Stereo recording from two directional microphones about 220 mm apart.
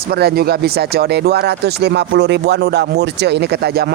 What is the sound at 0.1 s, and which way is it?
Speech, 45° right (ahead or behind).